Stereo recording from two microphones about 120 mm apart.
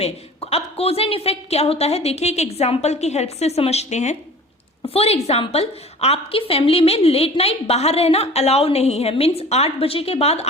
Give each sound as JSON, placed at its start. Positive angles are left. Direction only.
{"t": 0.5, "sound": "a woman's voice", "side_deg": 55}
{"t": 4.9, "sound": "a woman's voice", "side_deg": 60}